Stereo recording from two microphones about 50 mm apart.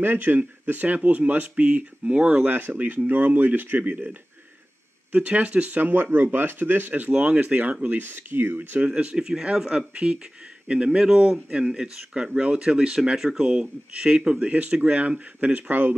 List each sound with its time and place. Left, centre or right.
0.0 s speech: right
2.5 s speech: right
5.8 s speech: right
8.0 s speech: right
8.7 s speech: right